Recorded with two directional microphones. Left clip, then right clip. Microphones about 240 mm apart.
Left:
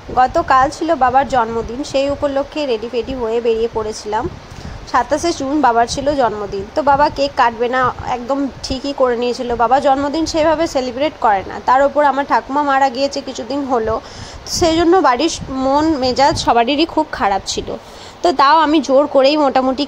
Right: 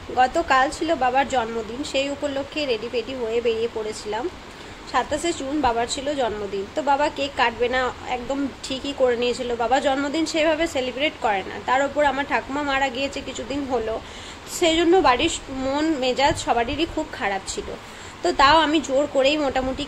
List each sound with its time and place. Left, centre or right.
0.1 s a woman's voice: centre
4.9 s a woman's voice: left